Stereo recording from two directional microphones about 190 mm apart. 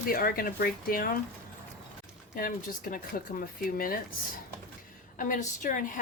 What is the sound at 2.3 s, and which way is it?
A woman's voice, 50° left (ahead or behind).